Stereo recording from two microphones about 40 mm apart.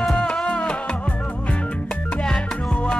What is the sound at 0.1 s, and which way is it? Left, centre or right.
Music, left.